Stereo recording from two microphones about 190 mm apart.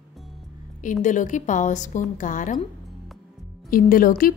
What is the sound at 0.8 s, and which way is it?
A woman's voice, 40° left (ahead or behind).